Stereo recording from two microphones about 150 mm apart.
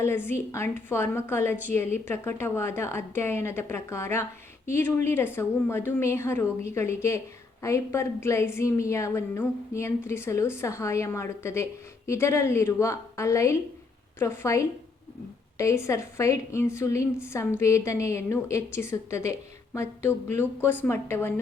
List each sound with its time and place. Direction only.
0.0 s a woman's voice: 15° left (ahead or behind)